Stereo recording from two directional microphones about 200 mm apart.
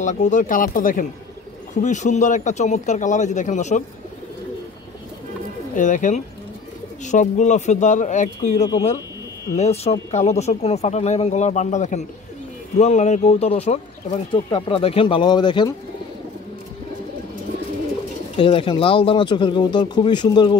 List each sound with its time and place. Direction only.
0.0 s speech: 35° left (ahead or behind)
5.8 s speech: 40° left (ahead or behind); by 15.7 s 20° left (ahead or behind)
18.3 s speech: 25° left (ahead or behind)